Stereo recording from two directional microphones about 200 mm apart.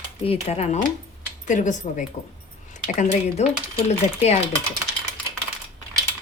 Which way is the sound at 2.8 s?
35° left (ahead or behind).